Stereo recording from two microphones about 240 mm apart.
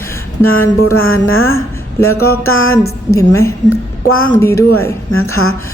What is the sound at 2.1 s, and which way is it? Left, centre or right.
Speech, left.